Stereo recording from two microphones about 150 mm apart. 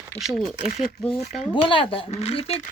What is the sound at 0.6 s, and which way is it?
Speech, 65° left (ahead or behind).